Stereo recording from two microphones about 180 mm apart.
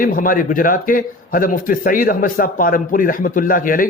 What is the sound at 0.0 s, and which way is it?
A man's voice, 50° left (ahead or behind).